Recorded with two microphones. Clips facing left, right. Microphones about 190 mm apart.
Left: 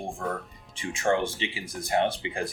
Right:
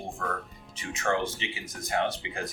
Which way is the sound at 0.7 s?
25° left (ahead or behind).